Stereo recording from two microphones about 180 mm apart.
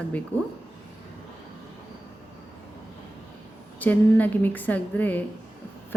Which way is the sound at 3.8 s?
10° left (ahead or behind).